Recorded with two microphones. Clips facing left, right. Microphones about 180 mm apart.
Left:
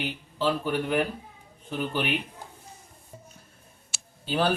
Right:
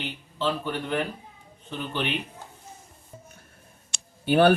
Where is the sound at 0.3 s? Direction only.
10° left (ahead or behind).